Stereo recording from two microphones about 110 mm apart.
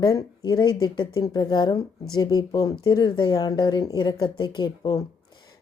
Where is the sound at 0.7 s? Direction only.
45° left (ahead or behind).